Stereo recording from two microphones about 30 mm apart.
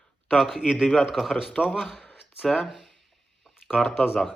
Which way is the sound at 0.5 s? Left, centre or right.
Centre.